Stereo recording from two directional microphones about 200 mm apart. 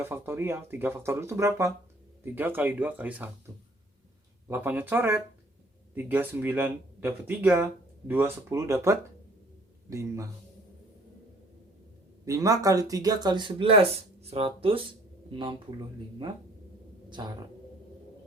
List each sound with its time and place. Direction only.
0.0 s speech: 10° right (ahead or behind)
4.4 s speech: 10° right (ahead or behind)
12.2 s speech: 15° right (ahead or behind)